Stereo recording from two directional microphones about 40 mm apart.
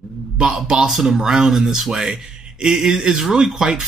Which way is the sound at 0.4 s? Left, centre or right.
Centre.